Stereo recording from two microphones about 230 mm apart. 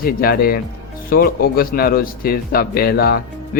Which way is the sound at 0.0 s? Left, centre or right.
Left.